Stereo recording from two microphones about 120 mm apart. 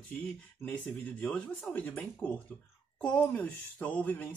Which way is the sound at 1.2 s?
5° left (ahead or behind).